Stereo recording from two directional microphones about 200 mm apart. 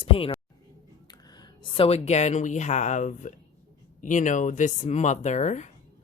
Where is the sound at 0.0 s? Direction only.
30° left (ahead or behind).